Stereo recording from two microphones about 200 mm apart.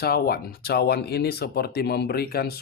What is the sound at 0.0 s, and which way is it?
Speech, 50° left (ahead or behind).